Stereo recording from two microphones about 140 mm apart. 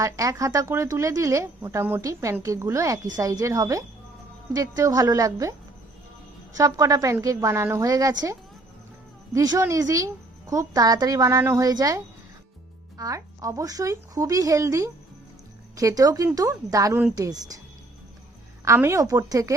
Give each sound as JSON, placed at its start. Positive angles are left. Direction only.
{"t": 0.0, "sound": "speech", "side_deg": -25}
{"t": 6.6, "sound": "speech", "side_deg": -25}
{"t": 18.6, "sound": "speech", "side_deg": -20}